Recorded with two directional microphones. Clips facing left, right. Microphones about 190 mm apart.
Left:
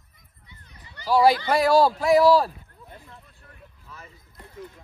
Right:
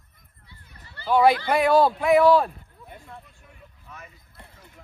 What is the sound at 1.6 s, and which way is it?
Speech, 35° left (ahead or behind).